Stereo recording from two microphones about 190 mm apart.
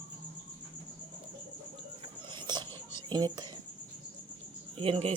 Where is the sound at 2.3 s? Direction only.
25° right (ahead or behind).